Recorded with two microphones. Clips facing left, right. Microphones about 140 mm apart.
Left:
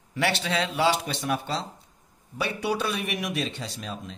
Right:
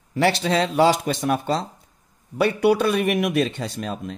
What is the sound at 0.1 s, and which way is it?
Speech, 40° right (ahead or behind).